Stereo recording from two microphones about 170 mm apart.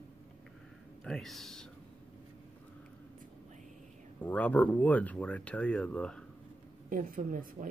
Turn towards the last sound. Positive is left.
turn(degrees=-55)  # may be behind; listen again after turning